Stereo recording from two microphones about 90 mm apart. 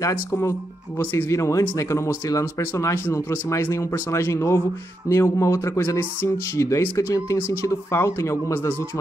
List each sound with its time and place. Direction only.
0.1 s speech: 30° left (ahead or behind)